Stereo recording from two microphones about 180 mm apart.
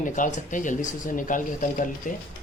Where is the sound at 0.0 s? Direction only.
45° left (ahead or behind).